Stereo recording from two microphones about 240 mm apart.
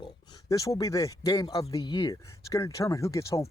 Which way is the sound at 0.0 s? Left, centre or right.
Centre.